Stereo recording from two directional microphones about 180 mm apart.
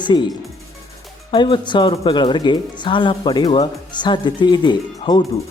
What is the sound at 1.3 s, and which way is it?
Speech, 25° left (ahead or behind).